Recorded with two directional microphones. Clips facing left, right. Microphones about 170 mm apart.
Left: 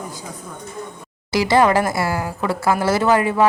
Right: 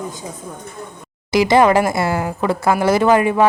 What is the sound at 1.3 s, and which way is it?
Speech, 20° right (ahead or behind).